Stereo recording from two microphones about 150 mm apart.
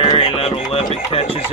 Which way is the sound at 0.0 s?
45° left (ahead or behind).